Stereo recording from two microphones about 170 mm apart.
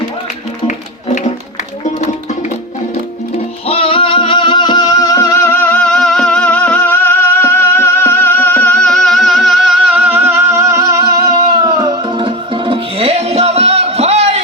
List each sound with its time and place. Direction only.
1.0 s music: 45° left (ahead or behind)
3.7 s music: 35° left (ahead or behind); by 14.4 s 40° right (ahead or behind)